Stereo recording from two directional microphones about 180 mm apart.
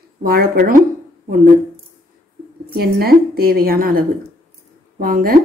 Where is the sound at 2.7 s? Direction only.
55° right (ahead or behind).